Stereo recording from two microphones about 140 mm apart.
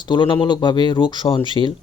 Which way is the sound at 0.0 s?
35° left (ahead or behind).